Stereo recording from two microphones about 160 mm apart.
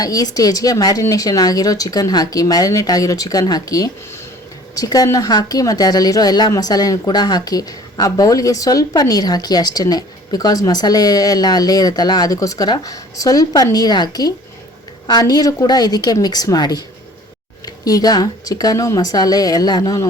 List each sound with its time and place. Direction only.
0.0 s a woman's voice: 25° left (ahead or behind)
17.8 s a woman's voice: 25° left (ahead or behind)